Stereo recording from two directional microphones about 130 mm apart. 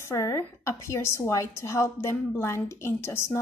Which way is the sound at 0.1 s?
20° left (ahead or behind).